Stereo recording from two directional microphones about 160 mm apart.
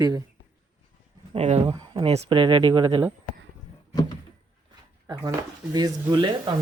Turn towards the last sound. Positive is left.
turn(degrees=-30)  # may be behind; listen again after turning